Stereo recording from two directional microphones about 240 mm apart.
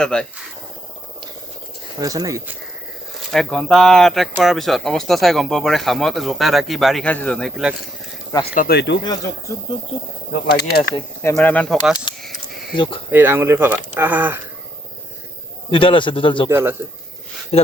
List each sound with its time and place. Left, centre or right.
0.0 s speech: centre
2.0 s speech: centre
3.3 s speech: centre
8.5 s speech: left
9.0 s speech: centre
10.3 s speech: left
10.9 s speech: centre
12.7 s a man's voice: centre
13.1 s speech: centre
15.7 s a man's voice: left
16.5 s speech: centre
17.5 s a man's voice: left